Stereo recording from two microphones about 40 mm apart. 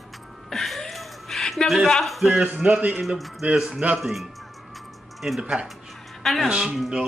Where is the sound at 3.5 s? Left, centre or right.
Centre.